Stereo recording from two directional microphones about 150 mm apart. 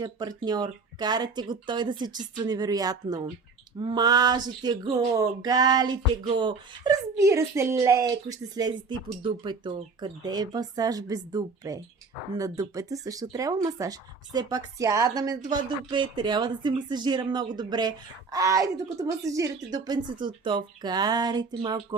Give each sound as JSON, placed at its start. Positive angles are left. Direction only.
{"t": 0.0, "sound": "speech", "side_deg": -25}